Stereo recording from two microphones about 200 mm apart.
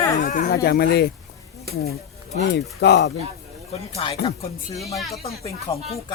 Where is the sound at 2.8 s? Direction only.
55° left (ahead or behind).